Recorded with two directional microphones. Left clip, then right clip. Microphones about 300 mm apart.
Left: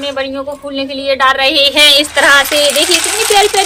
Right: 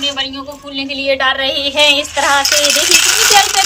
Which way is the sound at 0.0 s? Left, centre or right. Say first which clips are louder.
Left 1 dB; centre.